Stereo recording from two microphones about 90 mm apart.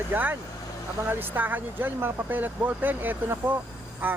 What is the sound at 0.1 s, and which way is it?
Speech, 20° right (ahead or behind).